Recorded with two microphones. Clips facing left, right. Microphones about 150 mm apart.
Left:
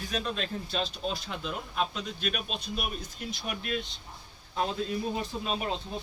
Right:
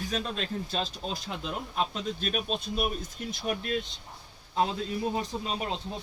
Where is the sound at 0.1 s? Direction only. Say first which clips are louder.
Left 2 dB; 35° right (ahead or behind).